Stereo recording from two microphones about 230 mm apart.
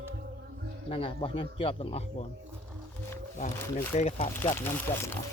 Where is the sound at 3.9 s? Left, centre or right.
Left.